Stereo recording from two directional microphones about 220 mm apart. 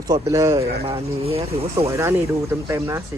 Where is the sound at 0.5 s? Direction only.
25° right (ahead or behind).